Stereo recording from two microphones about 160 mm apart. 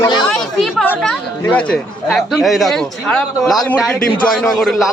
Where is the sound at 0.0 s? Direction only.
25° left (ahead or behind).